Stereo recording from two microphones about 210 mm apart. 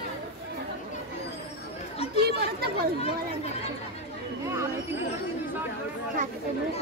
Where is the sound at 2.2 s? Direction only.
50° right (ahead or behind).